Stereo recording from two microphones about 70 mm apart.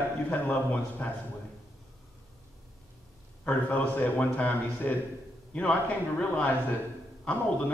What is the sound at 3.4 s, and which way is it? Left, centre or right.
A man's voice, left.